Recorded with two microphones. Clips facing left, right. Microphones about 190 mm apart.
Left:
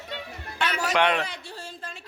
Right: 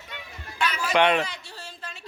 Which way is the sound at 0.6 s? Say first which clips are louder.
Even; 65° left (ahead or behind).